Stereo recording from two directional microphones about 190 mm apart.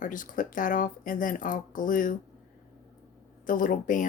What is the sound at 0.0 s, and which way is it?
Speech, 45° left (ahead or behind).